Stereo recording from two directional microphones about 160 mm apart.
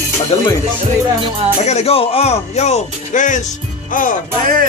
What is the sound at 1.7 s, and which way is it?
Speech, 40° left (ahead or behind).